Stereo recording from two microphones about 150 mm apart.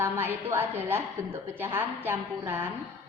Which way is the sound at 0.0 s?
15° right (ahead or behind).